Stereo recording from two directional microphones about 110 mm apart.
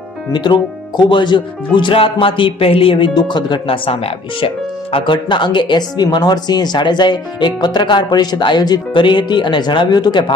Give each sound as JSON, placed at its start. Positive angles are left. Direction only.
{"t": 0.3, "sound": "speech", "side_deg": 45}